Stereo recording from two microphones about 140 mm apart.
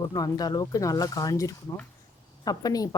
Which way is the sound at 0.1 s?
30° left (ahead or behind).